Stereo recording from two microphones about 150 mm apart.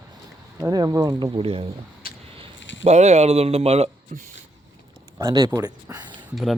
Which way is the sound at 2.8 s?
50° right (ahead or behind).